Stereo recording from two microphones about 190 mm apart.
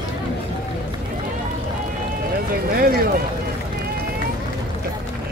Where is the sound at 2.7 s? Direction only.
50° right (ahead or behind).